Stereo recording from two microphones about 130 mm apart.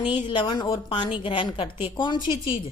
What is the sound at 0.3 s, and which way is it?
A woman's voice, 35° left (ahead or behind).